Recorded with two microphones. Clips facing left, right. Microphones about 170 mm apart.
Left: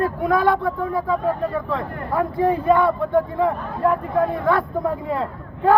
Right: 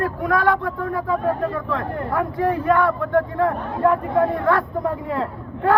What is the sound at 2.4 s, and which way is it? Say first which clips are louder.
Speech: left 2 dB; 15° left (ahead or behind).